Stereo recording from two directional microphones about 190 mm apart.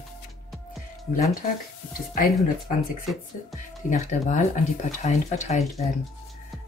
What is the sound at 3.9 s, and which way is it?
Speech, 40° left (ahead or behind).